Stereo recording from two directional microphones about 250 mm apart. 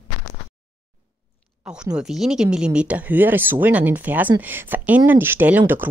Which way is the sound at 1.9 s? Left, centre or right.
Centre.